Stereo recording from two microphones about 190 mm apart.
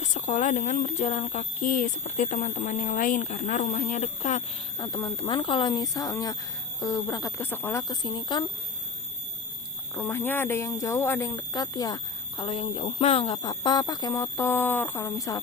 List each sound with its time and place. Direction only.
0.0 s speech: 40° left (ahead or behind)
4.8 s speech: 20° left (ahead or behind)
9.9 s speech: 10° left (ahead or behind)